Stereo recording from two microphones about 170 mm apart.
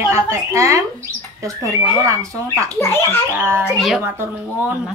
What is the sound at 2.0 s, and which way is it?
Speech, 20° right (ahead or behind).